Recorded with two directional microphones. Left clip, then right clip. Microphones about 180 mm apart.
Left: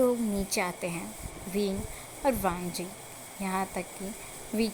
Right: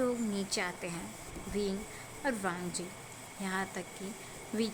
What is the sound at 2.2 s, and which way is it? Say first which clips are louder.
Speech: left 7 dB; 15° left (ahead or behind).